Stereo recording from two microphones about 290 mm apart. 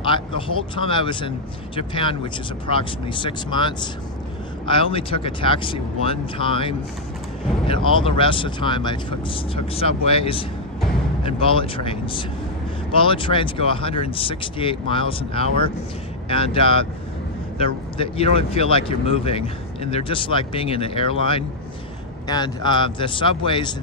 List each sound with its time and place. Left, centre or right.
0.7 s speech: centre